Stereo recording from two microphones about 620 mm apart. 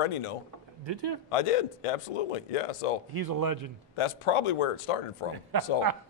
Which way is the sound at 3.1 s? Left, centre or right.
Right.